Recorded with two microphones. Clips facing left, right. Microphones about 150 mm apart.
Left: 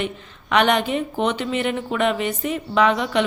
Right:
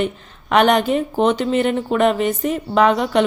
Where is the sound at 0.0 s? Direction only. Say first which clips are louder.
Right 5 dB; 40° right (ahead or behind).